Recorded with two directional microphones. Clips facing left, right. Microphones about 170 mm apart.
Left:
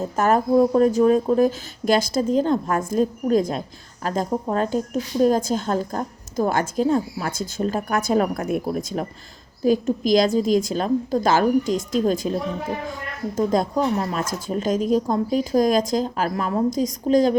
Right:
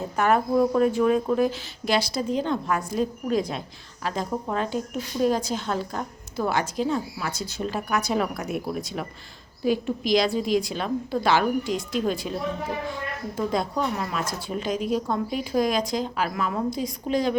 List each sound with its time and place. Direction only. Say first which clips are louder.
0.2 s a woman's voice: left 2 dB; 40° left (ahead or behind)
0.5 s a woman's voice: left 4 dB; 30° left (ahead or behind)